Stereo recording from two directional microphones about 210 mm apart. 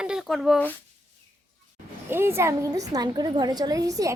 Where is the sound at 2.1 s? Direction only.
10° right (ahead or behind).